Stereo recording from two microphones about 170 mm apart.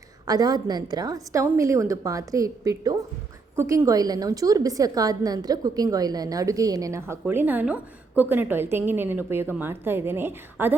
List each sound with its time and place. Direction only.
0.3 s a woman's voice: 20° right (ahead or behind)